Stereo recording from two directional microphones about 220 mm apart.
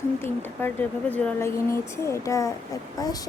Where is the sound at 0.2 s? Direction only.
10° left (ahead or behind).